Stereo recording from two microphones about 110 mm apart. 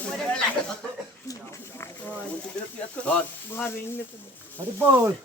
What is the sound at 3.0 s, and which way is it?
Speech, 10° left (ahead or behind).